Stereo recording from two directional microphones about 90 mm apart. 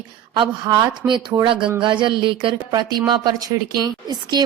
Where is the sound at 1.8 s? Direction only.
65° right (ahead or behind).